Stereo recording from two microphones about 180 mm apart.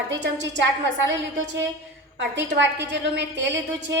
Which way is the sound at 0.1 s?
80° right.